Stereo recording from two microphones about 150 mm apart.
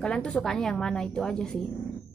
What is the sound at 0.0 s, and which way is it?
A woman's voice, 5° left (ahead or behind).